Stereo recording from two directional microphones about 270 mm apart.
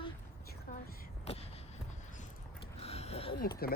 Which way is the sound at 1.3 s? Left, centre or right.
Left.